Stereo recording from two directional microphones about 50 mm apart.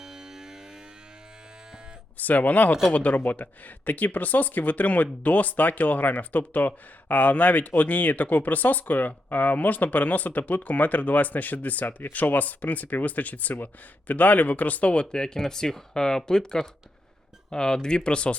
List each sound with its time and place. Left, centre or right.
0.0 s music: centre
2.1 s speech: left
15.1 s speech: centre